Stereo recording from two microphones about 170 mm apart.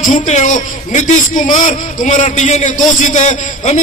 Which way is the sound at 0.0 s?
50° left (ahead or behind).